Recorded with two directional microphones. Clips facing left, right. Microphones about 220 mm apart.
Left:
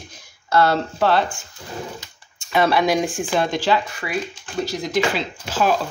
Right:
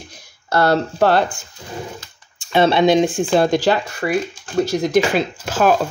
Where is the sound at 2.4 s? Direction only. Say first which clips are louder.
Right 4 dB; 25° right (ahead or behind).